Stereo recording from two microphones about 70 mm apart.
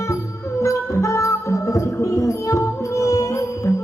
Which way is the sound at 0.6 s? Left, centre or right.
Left.